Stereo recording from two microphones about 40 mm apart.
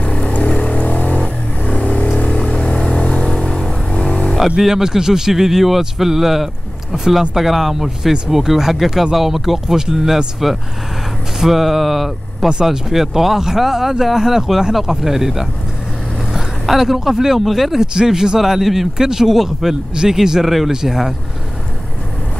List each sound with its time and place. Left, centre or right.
0.0 s vehicle: left
2.0 s vehicle: left
2.7 s vehicle: centre
4.1 s a sound: left
4.6 s speech: centre
18.4 s speech: centre
19.9 s speech: centre